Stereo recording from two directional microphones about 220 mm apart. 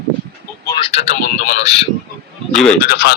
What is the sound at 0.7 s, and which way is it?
A man's voice, 25° left (ahead or behind).